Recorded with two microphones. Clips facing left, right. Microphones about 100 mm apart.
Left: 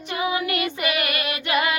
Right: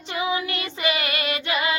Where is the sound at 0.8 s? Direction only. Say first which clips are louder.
Even; 25° right (ahead or behind).